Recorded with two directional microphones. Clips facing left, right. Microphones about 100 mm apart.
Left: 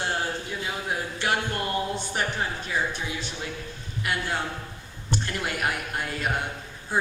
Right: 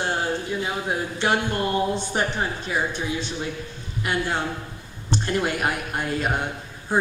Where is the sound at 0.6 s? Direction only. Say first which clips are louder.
Right 4 dB; 25° right (ahead or behind).